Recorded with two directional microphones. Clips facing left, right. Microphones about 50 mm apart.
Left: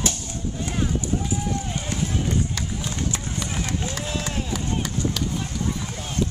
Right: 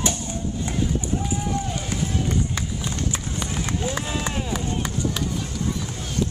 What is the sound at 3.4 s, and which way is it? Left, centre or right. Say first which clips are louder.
Run: right 2 dB; right.